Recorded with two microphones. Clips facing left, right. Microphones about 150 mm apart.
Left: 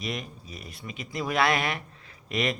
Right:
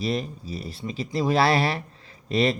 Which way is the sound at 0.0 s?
30° right (ahead or behind).